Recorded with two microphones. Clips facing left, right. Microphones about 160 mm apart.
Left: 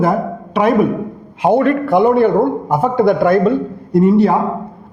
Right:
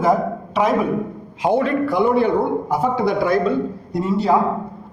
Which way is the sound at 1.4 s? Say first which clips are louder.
Left 5 dB; 55° left (ahead or behind).